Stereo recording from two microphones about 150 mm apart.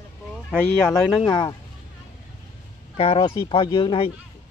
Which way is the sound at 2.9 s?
40° left (ahead or behind).